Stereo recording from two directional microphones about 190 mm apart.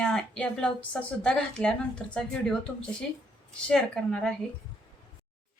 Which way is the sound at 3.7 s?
5° left (ahead or behind).